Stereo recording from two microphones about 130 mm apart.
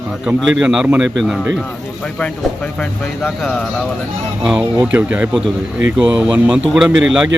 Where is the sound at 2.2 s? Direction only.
10° left (ahead or behind).